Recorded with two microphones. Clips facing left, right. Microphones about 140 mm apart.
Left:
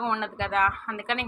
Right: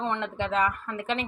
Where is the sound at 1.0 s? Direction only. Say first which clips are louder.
Right 2 dB; 60° left (ahead or behind).